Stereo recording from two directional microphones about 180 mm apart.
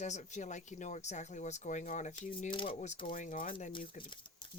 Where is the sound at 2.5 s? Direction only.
30° left (ahead or behind); by 3.7 s 45° left (ahead or behind).